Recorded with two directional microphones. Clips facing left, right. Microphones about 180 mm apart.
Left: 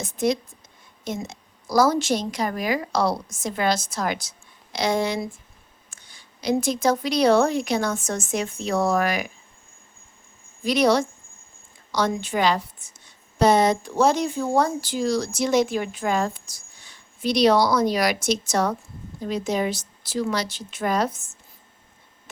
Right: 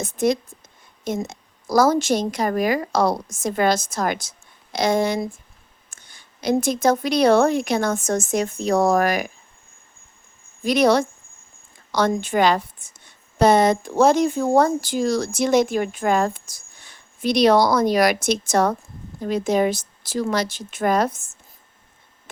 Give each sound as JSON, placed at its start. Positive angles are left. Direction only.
{"t": 0.0, "sound": "speech", "side_deg": -50}
{"t": 10.6, "sound": "speech", "side_deg": -50}